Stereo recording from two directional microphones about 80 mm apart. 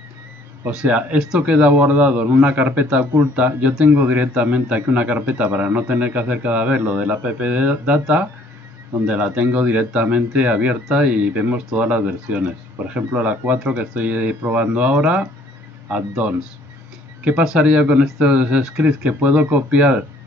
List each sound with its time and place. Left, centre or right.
0.7 s a man's voice: centre